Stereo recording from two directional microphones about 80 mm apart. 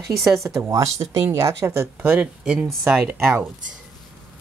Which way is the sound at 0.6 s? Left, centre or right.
Right.